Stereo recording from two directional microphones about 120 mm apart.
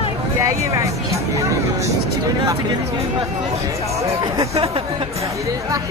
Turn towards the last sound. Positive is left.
turn(degrees=-55)  # may be behind; listen again after turning